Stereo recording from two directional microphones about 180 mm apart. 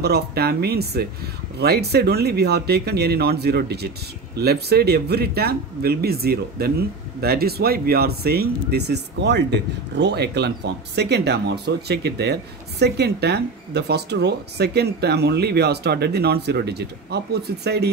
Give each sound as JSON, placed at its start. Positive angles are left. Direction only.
{"t": 0.0, "sound": "speech", "side_deg": -60}